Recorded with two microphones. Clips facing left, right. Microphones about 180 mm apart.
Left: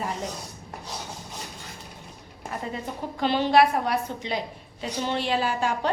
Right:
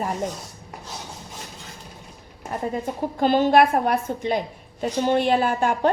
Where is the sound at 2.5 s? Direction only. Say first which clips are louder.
Right 6 dB; 45° right (ahead or behind).